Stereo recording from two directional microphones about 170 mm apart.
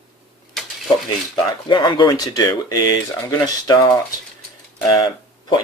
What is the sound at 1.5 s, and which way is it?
Speech, 25° left (ahead or behind).